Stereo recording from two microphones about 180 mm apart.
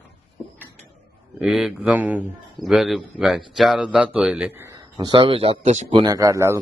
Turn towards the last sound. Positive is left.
turn(degrees=-15)  # may be behind; listen again after turning